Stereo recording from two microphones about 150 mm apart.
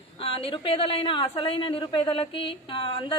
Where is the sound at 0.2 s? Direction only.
40° left (ahead or behind).